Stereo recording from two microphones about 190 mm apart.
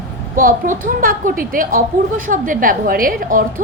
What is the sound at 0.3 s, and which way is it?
A woman's voice, 45° right (ahead or behind).